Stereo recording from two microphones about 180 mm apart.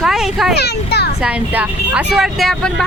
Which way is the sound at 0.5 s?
65° left (ahead or behind).